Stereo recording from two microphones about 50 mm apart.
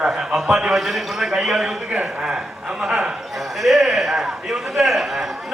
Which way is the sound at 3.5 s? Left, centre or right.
Centre.